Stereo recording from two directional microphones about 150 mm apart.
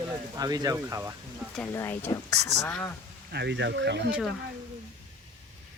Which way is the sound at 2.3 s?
90° right.